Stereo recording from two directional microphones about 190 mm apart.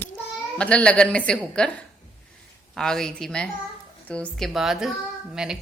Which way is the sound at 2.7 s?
5° left (ahead or behind).